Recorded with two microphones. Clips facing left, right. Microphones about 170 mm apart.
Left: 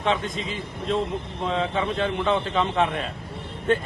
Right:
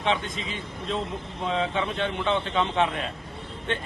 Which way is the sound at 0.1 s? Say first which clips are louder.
Left 2 dB; centre (ahead or behind).